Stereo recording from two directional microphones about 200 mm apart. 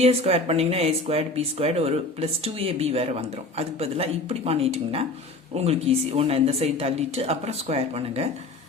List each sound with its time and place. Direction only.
0.0 s speech: 30° right (ahead or behind)